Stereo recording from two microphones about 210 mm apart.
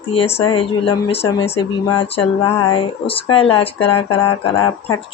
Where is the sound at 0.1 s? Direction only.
30° left (ahead or behind).